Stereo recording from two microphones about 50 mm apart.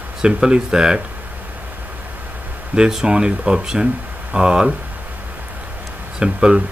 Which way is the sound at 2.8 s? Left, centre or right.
Centre.